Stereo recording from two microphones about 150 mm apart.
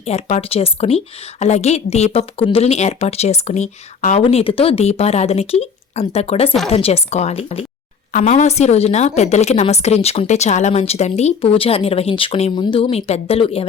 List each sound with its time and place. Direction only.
0.0 s a woman's voice: 45° left (ahead or behind)
4.2 s a woman's voice: 40° left (ahead or behind)
8.1 s a woman's voice: 55° left (ahead or behind)